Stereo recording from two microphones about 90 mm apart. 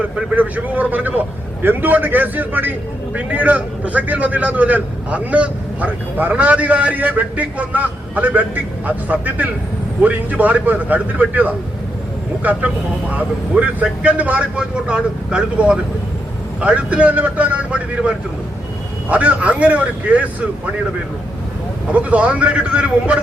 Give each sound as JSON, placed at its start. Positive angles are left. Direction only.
{"t": 0.0, "sound": "a man's voice", "side_deg": -15}
{"t": 21.9, "sound": "a man's voice", "side_deg": -15}